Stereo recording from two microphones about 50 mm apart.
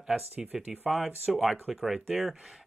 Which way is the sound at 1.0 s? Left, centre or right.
Centre.